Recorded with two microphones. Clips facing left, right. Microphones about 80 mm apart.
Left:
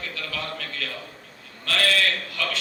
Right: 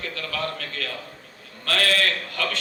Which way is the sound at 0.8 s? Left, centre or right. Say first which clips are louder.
Right 1 dB; right.